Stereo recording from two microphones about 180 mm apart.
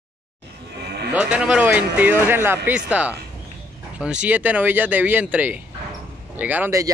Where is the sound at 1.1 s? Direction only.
5° right (ahead or behind).